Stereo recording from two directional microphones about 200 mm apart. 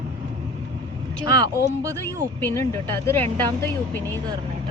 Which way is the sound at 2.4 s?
15° left (ahead or behind).